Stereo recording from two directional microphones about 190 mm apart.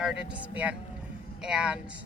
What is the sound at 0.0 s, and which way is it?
Speech, 5° right (ahead or behind).